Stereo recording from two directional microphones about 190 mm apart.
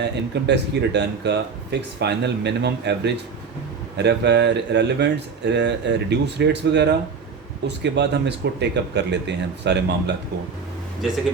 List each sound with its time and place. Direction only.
0.0 s speech: 65° right (ahead or behind)